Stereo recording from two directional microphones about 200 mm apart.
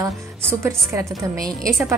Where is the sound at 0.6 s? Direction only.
15° right (ahead or behind).